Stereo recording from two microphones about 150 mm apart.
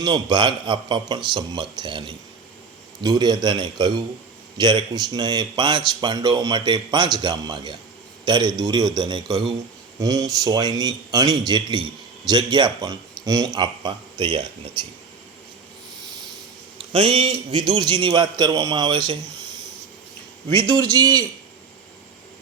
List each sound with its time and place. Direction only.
0.0 s a man's voice: 30° right (ahead or behind)
16.9 s a man's voice: 40° right (ahead or behind)
20.7 s speech: 25° right (ahead or behind)